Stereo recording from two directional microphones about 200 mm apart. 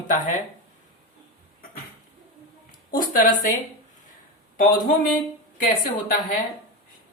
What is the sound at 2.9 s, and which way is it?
Speech, 45° left (ahead or behind).